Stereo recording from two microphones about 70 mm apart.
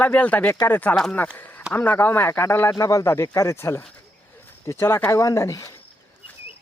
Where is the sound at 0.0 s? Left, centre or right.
Left.